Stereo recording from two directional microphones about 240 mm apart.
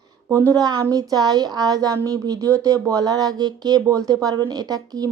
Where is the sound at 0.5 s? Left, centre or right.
Centre.